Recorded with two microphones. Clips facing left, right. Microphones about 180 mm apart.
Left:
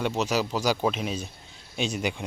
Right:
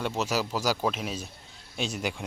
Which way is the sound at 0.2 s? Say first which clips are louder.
Left 2 dB; 5° right (ahead or behind).